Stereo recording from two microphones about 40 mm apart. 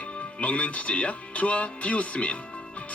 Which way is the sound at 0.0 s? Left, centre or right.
Left.